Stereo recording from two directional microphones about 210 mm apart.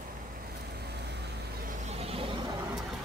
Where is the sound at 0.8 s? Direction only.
50° right (ahead or behind).